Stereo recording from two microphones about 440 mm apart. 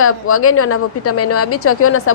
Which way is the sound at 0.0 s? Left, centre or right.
Left.